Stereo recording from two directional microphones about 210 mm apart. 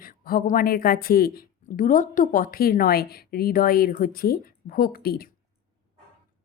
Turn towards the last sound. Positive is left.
turn(degrees=45)  # may be behind; listen again after turning